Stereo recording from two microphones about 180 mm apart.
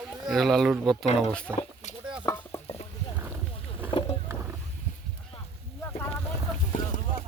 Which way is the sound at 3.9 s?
30° left (ahead or behind).